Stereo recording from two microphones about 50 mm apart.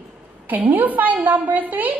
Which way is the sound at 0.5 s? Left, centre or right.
Right.